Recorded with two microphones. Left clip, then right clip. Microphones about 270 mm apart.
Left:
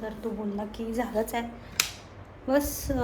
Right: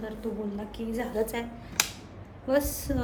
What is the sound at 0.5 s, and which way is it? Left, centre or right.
Speech, centre.